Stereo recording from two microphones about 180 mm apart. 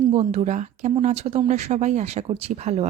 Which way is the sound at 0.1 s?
35° right (ahead or behind).